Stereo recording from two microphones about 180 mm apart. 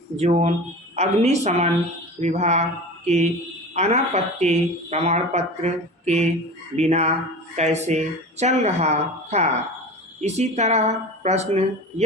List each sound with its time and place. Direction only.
0.2 s speech: 40° right (ahead or behind)
3.8 s speech: 40° right (ahead or behind)